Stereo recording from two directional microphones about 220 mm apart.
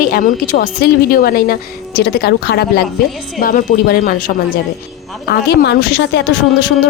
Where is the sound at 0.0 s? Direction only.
40° left (ahead or behind).